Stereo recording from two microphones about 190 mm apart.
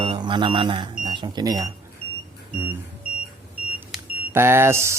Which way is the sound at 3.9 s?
10° right (ahead or behind).